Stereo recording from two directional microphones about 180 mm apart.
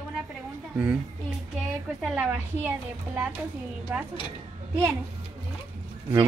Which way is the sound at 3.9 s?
10° right (ahead or behind).